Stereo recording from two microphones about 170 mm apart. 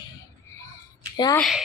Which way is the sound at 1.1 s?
25° left (ahead or behind).